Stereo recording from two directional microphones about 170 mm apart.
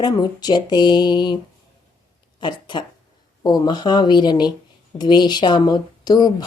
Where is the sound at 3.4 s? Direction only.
25° left (ahead or behind).